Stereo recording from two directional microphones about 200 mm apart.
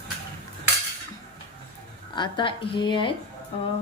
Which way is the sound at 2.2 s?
25° left (ahead or behind).